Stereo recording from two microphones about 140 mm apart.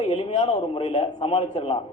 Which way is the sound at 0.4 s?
40° left (ahead or behind).